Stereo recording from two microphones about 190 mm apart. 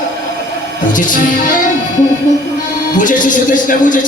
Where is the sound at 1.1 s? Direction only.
45° left (ahead or behind).